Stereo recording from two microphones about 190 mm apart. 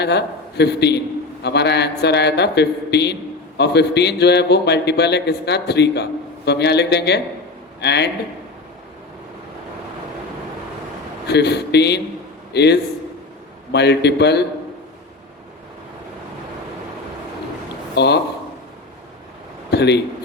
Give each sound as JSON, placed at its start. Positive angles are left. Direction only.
{"t": 0.0, "sound": "a man's voice", "side_deg": 60}
{"t": 11.3, "sound": "a man's voice", "side_deg": 60}
{"t": 17.9, "sound": "a man's voice", "side_deg": 60}
{"t": 19.7, "sound": "a man's voice", "side_deg": 60}